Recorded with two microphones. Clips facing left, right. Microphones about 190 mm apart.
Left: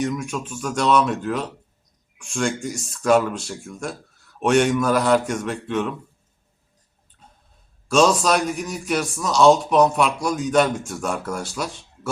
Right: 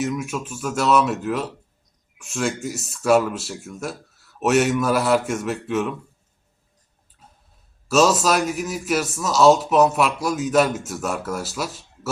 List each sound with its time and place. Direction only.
0.0 s speech: 5° right (ahead or behind)
7.9 s speech: 5° right (ahead or behind)